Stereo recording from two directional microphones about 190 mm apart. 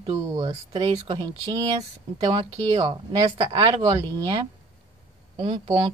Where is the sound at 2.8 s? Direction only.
20° right (ahead or behind).